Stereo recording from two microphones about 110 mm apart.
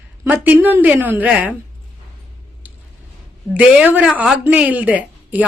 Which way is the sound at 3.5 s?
10° right (ahead or behind).